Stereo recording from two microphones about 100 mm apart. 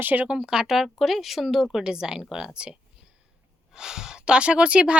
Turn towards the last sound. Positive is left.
turn(degrees=-10)  # may be behind; listen again after turning